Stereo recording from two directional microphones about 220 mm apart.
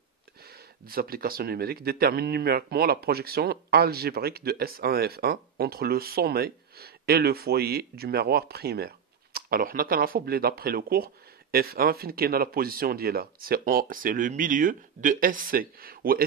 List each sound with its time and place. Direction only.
0.4 s speech: 45° right (ahead or behind)